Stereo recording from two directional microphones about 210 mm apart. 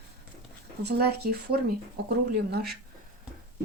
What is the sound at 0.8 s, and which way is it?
Speech, 50° right (ahead or behind).